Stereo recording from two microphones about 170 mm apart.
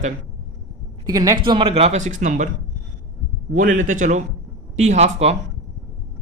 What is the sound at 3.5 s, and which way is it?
Speech, 50° right (ahead or behind).